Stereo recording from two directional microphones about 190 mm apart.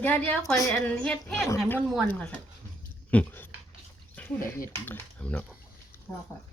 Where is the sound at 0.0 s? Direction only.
10° left (ahead or behind).